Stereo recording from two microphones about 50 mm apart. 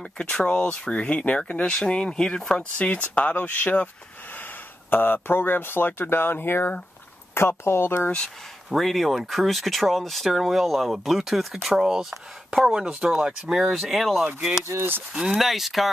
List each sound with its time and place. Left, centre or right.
0.2 s speech: left
8.6 s speech: centre
14.2 s speech: centre
15.3 s speech: centre